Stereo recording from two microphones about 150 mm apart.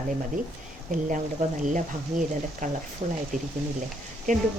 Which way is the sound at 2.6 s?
60° right (ahead or behind).